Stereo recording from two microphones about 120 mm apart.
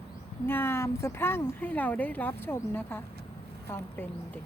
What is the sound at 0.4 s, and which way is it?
Speech, 20° left (ahead or behind).